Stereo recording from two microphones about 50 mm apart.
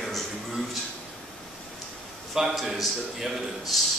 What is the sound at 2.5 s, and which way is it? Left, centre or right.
A man's voice, centre.